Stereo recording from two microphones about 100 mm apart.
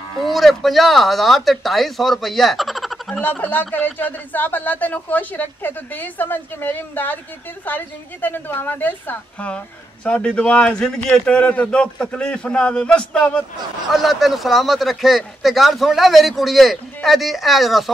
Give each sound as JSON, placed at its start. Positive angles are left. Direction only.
{"t": 0.2, "sound": "speech", "side_deg": 0}
{"t": 3.2, "sound": "speech", "side_deg": 15}
{"t": 13.9, "sound": "speech", "side_deg": 0}